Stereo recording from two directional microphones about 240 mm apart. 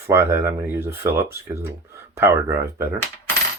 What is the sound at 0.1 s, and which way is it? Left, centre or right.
Speech, centre.